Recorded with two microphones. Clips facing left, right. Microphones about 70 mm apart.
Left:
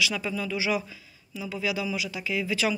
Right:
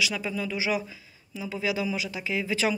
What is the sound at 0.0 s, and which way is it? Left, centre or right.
Speech, centre.